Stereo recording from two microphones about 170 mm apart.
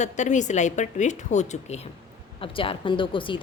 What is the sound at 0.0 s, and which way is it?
A woman's voice, 45° left (ahead or behind).